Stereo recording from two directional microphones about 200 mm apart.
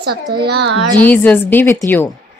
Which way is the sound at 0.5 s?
60° right (ahead or behind).